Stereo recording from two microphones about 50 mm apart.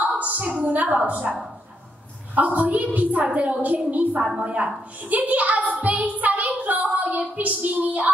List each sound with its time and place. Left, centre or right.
0.0 s a woman's voice: right